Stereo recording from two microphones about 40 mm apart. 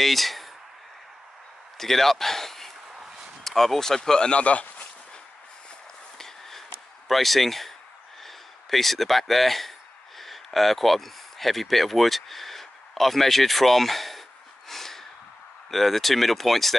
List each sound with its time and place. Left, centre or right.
0.0 s a sound: centre
1.8 s a man's voice: centre
4.3 s speech: left
6.1 s a sound: centre
7.1 s speech: centre
14.7 s snort: centre
15.7 s speech: centre